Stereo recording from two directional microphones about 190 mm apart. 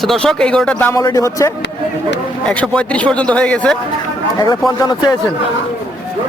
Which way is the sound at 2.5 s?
5° left (ahead or behind).